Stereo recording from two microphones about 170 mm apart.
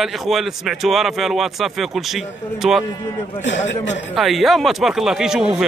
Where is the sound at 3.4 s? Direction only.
90° left.